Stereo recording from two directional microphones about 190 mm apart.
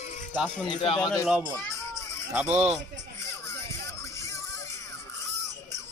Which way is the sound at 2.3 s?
5° right (ahead or behind).